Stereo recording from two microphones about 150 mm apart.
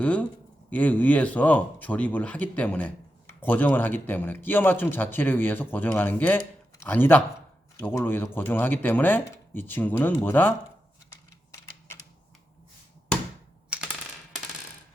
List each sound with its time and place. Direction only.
0.0 s speech: 10° left (ahead or behind)
11.5 s typing: 20° left (ahead or behind)
13.7 s mechanisms: 5° right (ahead or behind)